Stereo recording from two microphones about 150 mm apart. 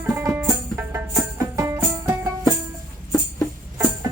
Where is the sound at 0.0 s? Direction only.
15° right (ahead or behind).